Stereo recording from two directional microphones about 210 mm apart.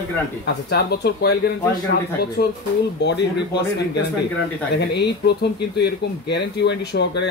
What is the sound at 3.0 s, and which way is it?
Speech, 55° left (ahead or behind).